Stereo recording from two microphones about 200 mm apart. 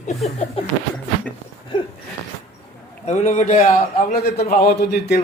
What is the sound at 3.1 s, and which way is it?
A man's voice, 35° left (ahead or behind).